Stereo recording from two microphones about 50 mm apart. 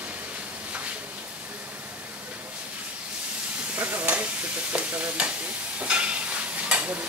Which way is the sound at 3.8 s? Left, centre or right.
Right.